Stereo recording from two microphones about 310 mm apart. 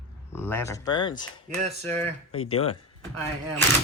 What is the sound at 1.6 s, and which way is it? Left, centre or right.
Speech, right.